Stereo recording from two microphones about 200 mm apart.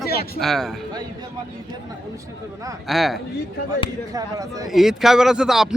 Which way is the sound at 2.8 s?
Centre (ahead or behind).